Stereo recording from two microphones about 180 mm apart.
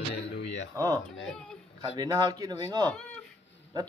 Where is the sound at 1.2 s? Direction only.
5° left (ahead or behind).